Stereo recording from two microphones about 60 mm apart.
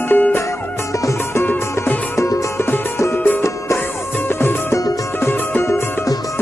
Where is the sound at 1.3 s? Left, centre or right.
Left.